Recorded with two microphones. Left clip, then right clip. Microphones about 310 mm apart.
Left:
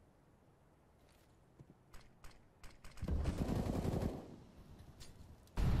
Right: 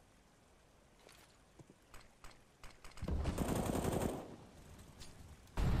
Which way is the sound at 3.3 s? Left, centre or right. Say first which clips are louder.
Right 4 dB; right.